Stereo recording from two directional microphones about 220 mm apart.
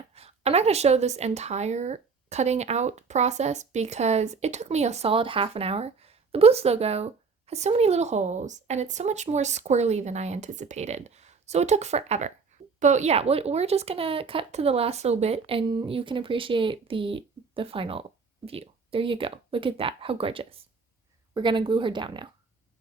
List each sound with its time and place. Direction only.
0.1 s a woman's voice: 30° right (ahead or behind)